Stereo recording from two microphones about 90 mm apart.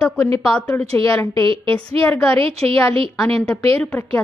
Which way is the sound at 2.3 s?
90° right.